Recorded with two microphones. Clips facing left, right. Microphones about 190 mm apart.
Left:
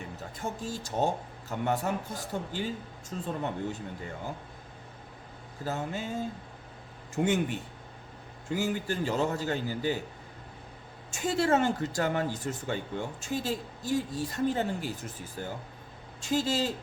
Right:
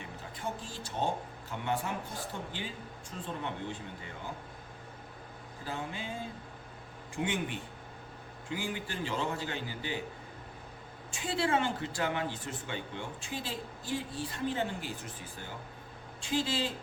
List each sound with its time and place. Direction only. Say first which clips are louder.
0.3 s speech: left 4 dB; 45° left (ahead or behind)
5.6 s speech: left 5 dB; 45° left (ahead or behind)
11.1 s speech: left 5 dB; 45° left (ahead or behind)
16.2 s speech: left 4 dB; 45° left (ahead or behind)